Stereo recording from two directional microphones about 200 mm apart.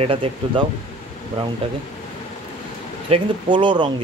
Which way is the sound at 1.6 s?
30° right (ahead or behind).